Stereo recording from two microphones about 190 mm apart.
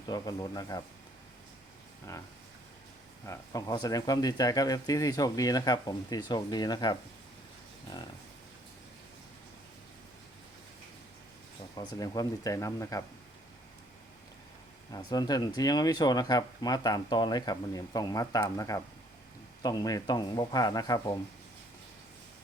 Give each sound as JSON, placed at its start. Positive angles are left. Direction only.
{"t": 0.1, "sound": "speech", "side_deg": 20}
{"t": 3.2, "sound": "speech", "side_deg": 20}
{"t": 11.8, "sound": "speech", "side_deg": 20}
{"t": 14.9, "sound": "speech", "side_deg": 20}